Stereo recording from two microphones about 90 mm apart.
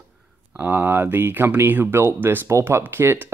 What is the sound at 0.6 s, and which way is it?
Speech, 20° right (ahead or behind).